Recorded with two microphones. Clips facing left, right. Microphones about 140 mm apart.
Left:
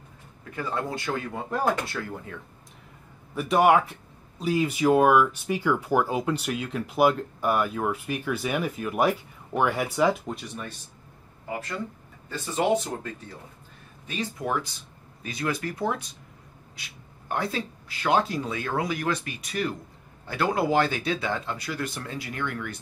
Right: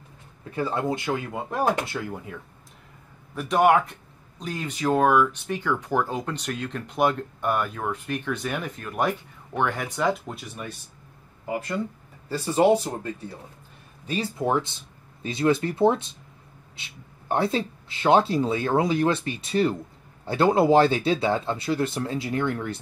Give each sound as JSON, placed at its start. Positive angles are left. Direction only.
{"t": 0.6, "sound": "speech", "side_deg": -25}
{"t": 3.3, "sound": "speech", "side_deg": 0}
{"t": 12.3, "sound": "speech", "side_deg": -35}
{"t": 14.0, "sound": "speech", "side_deg": -30}